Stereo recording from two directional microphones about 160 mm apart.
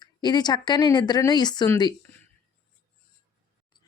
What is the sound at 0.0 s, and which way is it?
Speech, 25° left (ahead or behind).